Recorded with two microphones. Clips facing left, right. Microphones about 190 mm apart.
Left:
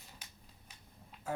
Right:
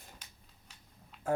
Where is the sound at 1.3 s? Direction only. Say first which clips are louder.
Right 8 dB; 50° right (ahead or behind).